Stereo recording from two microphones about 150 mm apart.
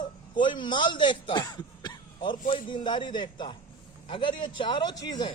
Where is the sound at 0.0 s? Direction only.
30° left (ahead or behind).